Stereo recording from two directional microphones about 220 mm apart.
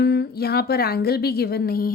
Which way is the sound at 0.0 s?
50° left (ahead or behind).